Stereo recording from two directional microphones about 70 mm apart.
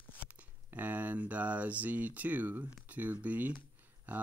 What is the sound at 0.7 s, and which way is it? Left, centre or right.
Speech, right.